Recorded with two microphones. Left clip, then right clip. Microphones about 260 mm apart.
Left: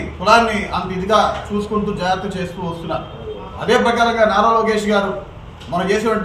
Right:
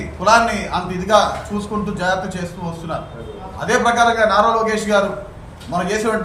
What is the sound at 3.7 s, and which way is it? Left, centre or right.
A man's voice, right.